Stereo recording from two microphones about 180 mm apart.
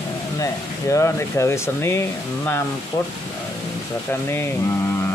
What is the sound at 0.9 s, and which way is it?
Speech, 15° left (ahead or behind).